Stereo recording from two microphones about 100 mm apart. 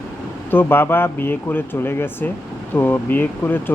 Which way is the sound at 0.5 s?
20° left (ahead or behind).